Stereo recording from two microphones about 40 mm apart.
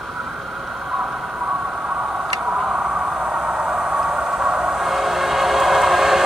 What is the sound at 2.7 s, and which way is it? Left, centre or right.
Vehicle, right.